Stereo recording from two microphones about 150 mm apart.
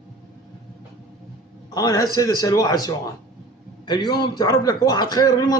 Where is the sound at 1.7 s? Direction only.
25° left (ahead or behind).